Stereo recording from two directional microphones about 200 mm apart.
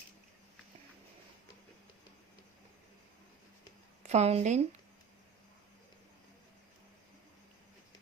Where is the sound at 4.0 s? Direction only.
35° right (ahead or behind).